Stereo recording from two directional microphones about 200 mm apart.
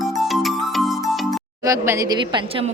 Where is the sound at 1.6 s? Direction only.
15° right (ahead or behind).